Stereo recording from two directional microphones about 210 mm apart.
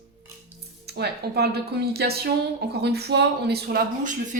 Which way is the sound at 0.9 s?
50° right (ahead or behind).